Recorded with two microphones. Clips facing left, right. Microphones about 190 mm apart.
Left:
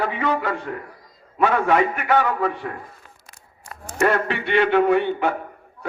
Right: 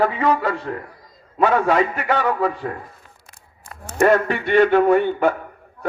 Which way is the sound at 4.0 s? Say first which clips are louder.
Right 4 dB; 45° right (ahead or behind).